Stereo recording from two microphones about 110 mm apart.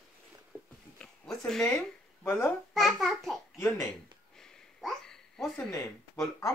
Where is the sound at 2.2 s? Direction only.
20° left (ahead or behind).